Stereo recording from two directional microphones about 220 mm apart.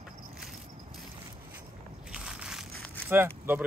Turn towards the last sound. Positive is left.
turn(degrees=-10)  # may be behind; listen again after turning